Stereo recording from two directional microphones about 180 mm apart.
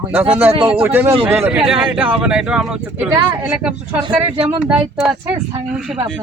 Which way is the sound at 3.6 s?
5° right (ahead or behind).